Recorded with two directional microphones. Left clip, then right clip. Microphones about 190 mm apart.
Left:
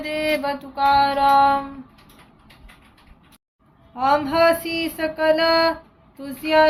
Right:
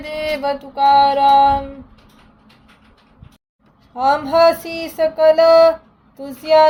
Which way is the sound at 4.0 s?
30° right (ahead or behind).